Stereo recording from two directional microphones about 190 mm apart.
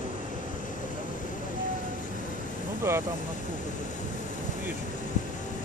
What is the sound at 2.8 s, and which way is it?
Speech, 15° right (ahead or behind).